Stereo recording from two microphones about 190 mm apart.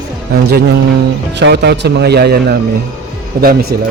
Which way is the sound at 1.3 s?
65° right (ahead or behind).